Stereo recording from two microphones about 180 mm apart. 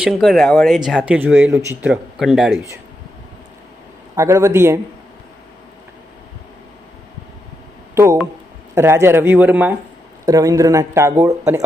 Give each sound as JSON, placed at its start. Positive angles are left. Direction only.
{"t": 0.0, "sound": "speech", "side_deg": 0}
{"t": 4.1, "sound": "speech", "side_deg": -15}
{"t": 7.9, "sound": "speech", "side_deg": -15}